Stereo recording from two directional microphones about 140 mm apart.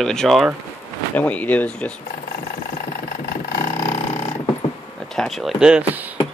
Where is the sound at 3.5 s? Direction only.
80° left; by 4.3 s 60° left (ahead or behind).